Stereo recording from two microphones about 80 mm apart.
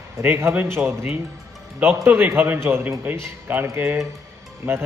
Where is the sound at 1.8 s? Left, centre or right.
Right.